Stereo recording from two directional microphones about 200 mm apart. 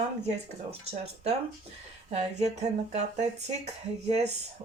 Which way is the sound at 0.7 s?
30° right (ahead or behind).